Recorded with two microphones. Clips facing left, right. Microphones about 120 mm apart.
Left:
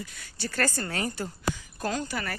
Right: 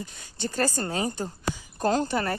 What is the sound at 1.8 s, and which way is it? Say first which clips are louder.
Speech: right 7 dB; 35° right (ahead or behind).